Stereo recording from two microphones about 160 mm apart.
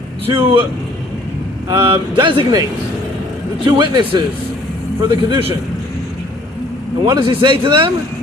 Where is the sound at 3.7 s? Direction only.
30° right (ahead or behind).